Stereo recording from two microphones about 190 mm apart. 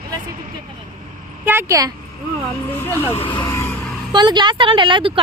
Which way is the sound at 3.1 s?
25° left (ahead or behind).